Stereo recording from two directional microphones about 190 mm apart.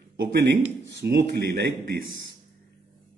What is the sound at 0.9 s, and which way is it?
Speech, 60° right (ahead or behind).